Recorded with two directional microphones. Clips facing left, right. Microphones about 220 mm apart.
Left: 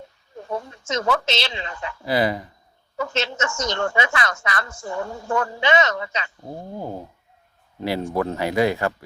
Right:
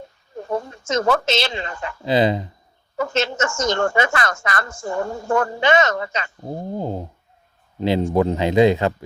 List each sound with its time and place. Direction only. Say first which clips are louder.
0.3 s speech: right 4 dB; 50° right (ahead or behind)
2.0 s speech: right 4 dB; 20° right (ahead or behind)
3.0 s a woman's voice: right 4 dB; 50° right (ahead or behind)
6.4 s speech: right 5 dB; 20° right (ahead or behind)